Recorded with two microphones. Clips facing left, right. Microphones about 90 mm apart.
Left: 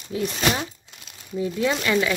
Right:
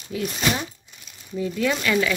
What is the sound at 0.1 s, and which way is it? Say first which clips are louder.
Speech: left 1 dB; 30° left (ahead or behind).